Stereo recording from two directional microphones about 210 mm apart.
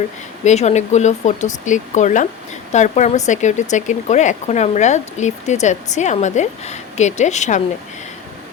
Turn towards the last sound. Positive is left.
turn(degrees=35)  # may be behind; listen again after turning